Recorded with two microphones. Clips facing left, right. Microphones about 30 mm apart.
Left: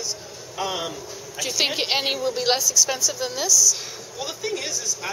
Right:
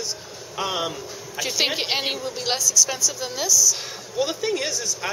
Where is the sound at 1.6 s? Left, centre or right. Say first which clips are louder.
Left 1 dB; centre.